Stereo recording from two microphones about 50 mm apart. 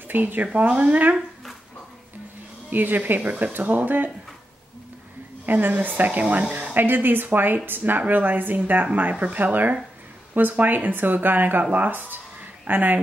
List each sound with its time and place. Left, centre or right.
0.1 s speech: right
0.5 s speech: right
2.7 s speech: right
5.4 s speech: right
12.4 s a sound: right